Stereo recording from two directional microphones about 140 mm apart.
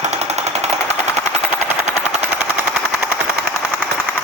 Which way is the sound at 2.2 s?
10° right (ahead or behind).